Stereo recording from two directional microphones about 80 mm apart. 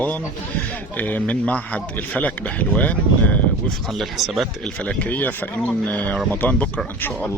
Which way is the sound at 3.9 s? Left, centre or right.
Centre.